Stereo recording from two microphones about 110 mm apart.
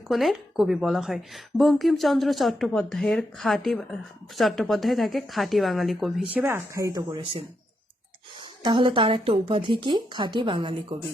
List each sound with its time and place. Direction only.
0.1 s speech: centre (ahead or behind)
6.2 s speech: 15° right (ahead or behind); by 7.2 s 30° right (ahead or behind)
8.4 s speech: 45° right (ahead or behind)